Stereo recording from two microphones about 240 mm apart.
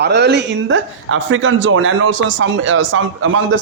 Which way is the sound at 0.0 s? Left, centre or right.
Right.